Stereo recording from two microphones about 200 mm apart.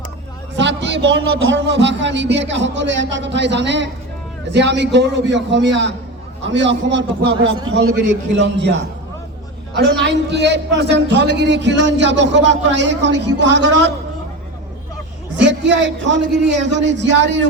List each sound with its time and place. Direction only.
0.5 s a man's voice: 65° right (ahead or behind)
8.4 s a man's voice: 60° right (ahead or behind)
15.4 s a man's voice: 60° right (ahead or behind)